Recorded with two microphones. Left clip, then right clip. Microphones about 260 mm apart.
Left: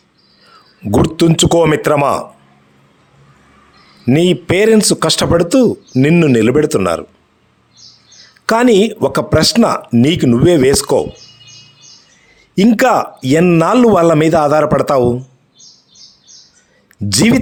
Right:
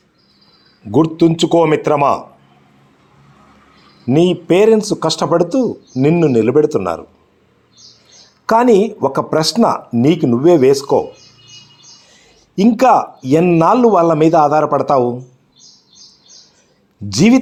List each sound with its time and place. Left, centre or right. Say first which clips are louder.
0.9 s speech: even; left
4.0 s speech: left 1 dB; left
8.4 s speech: even; left
12.5 s speech: even; left
17.1 s speech: even; left